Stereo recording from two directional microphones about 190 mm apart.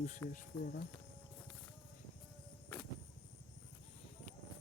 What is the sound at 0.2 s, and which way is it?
Speech, 15° left (ahead or behind).